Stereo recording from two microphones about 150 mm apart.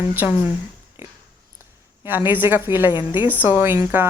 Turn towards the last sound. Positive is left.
turn(degrees=-15)  # may be behind; listen again after turning